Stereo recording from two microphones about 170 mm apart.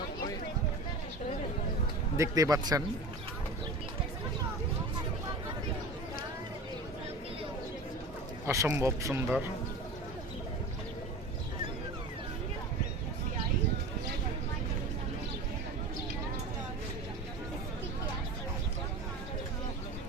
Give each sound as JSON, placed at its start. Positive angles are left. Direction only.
{"t": 2.1, "sound": "speech", "side_deg": -20}
{"t": 8.4, "sound": "speech", "side_deg": -15}